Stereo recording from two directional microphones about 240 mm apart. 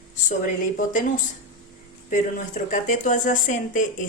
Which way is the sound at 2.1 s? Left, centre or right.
Left.